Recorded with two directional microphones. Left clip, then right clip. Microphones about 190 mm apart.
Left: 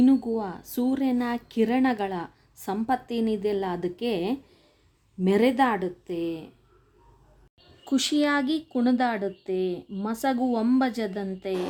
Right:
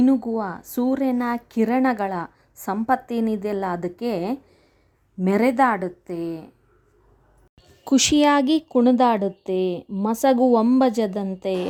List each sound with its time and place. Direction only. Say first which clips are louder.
0.0 s a woman's voice: right 2 dB; 20° right (ahead or behind)
7.9 s speech: right 7 dB; 35° right (ahead or behind)